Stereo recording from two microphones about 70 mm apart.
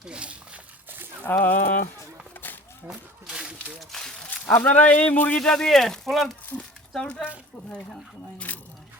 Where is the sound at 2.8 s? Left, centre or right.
Centre.